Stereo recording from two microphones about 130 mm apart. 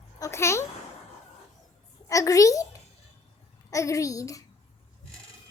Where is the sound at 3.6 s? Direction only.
25° left (ahead or behind).